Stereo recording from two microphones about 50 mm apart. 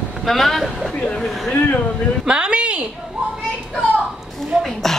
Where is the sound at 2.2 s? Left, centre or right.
Centre.